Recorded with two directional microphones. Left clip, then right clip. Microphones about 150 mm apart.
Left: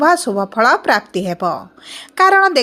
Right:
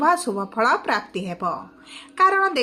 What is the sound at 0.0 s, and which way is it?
A woman's voice, 55° left (ahead or behind).